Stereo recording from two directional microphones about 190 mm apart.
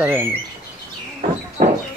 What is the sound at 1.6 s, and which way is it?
Chicken, 45° right (ahead or behind).